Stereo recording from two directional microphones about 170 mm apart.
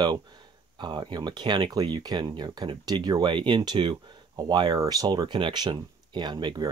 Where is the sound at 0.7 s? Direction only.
25° right (ahead or behind).